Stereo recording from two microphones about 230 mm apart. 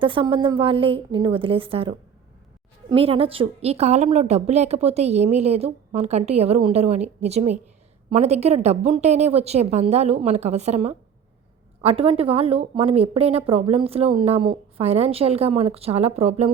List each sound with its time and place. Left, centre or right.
0.0 s a woman's voice: right